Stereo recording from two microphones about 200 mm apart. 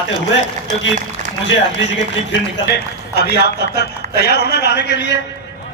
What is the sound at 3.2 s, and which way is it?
A man's voice, 55° left (ahead or behind).